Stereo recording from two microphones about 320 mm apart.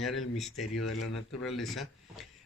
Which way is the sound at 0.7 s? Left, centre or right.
Left.